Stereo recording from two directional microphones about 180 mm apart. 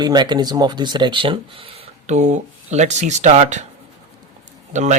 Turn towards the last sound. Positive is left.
turn(degrees=-40)  # may be behind; listen again after turning